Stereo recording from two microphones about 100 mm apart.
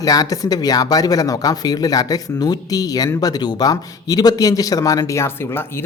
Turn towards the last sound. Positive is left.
turn(degrees=25)  # may be behind; listen again after turning